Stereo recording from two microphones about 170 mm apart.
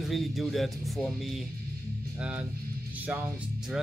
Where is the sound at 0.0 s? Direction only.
Centre (ahead or behind).